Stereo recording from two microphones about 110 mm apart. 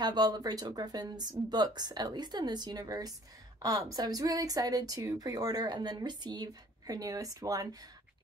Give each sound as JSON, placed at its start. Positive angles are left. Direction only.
{"t": 0.0, "sound": "a woman's voice", "side_deg": -40}